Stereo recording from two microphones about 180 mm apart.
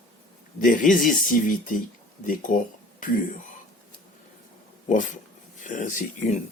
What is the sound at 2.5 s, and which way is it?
Speech, 50° left (ahead or behind).